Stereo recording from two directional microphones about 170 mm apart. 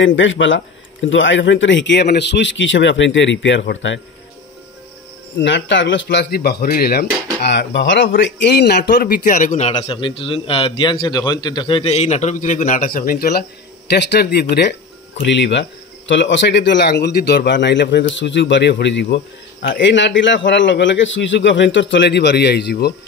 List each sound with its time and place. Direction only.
0.1 s a man's voice: 90° left
5.4 s speech: 90° left; by 9.1 s 70° left (ahead or behind)
9.2 s a man's voice: 45° left (ahead or behind); by 14.8 s 75° left (ahead or behind)
15.2 s a man's voice: 90° left; by 22.9 s 70° left (ahead or behind)